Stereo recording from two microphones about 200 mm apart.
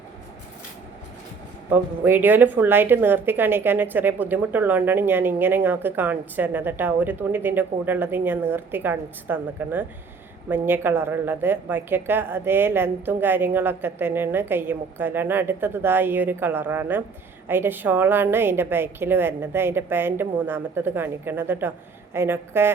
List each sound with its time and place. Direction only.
1.7 s a woman's voice: 10° right (ahead or behind)